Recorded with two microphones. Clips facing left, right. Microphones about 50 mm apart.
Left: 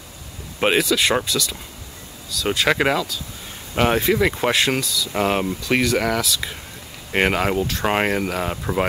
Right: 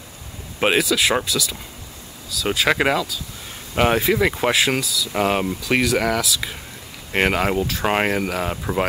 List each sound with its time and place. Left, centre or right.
0.6 s speech: centre